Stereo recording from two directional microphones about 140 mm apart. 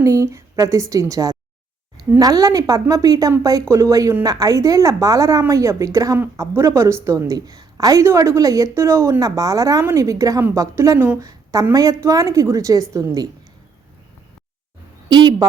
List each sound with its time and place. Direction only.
0.0 s speech: 20° right (ahead or behind)
15.1 s speech: 30° right (ahead or behind)